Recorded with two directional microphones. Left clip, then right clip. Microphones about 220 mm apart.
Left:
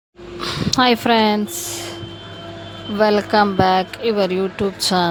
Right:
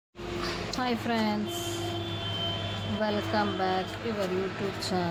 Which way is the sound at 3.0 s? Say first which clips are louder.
Left 14 dB; 45° left (ahead or behind).